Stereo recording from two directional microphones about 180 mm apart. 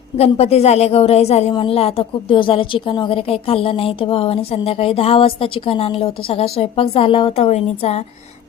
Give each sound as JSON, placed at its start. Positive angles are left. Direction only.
{"t": 0.2, "sound": "a woman's voice", "side_deg": 35}